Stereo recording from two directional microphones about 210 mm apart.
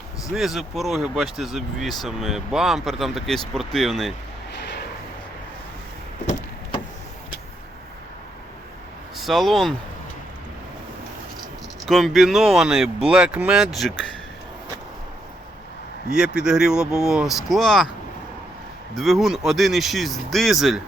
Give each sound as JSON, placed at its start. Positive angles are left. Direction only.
{"t": 0.3, "sound": "speech", "side_deg": 0}
{"t": 4.5, "sound": "a sound", "side_deg": 55}
{"t": 9.1, "sound": "speech", "side_deg": 0}
{"t": 11.9, "sound": "speech", "side_deg": 0}
{"t": 16.1, "sound": "speech", "side_deg": -5}
{"t": 18.9, "sound": "speech", "side_deg": 0}